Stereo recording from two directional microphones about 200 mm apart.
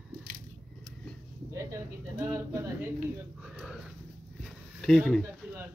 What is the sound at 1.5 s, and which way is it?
Speech, 15° right (ahead or behind).